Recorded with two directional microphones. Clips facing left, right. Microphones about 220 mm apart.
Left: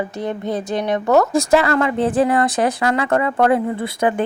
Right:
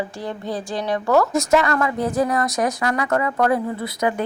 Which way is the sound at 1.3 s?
35° left (ahead or behind).